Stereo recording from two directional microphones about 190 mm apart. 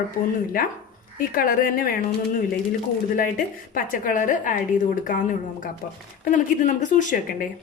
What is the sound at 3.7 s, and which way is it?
A woman's voice, 45° left (ahead or behind).